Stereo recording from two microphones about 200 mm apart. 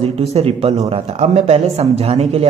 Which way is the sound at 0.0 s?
30° right (ahead or behind).